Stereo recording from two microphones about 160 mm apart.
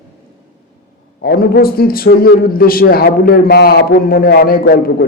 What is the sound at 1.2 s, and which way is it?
A man's voice, 80° left.